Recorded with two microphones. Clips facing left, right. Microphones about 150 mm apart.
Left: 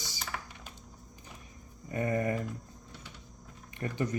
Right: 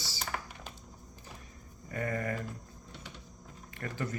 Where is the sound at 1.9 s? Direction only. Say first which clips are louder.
Left 4 dB; 20° left (ahead or behind).